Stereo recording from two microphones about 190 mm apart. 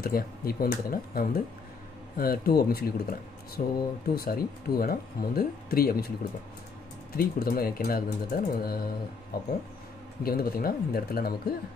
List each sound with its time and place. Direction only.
0.0 s speech: 50° left (ahead or behind)
7.2 s speech: 50° left (ahead or behind)